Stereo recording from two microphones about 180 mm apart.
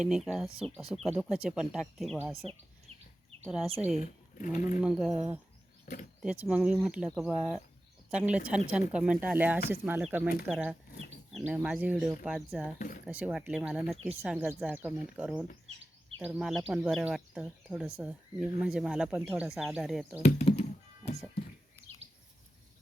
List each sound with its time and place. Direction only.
0.0 s speech: centre (ahead or behind)
3.4 s speech: 5° right (ahead or behind)
3.9 s speech: 40° left (ahead or behind)
4.8 s speech: 5° right (ahead or behind)
5.8 s speech: 50° left (ahead or behind)
6.2 s speech: 10° right (ahead or behind)
20.2 s music: 35° left (ahead or behind)